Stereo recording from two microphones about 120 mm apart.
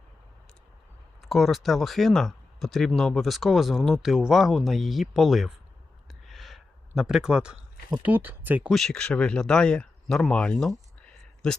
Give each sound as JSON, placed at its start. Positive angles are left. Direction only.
{"t": 1.2, "sound": "speech", "side_deg": 0}
{"t": 6.1, "sound": "a sound", "side_deg": 0}
{"t": 8.0, "sound": "speech", "side_deg": -15}
{"t": 8.7, "sound": "speech", "side_deg": 5}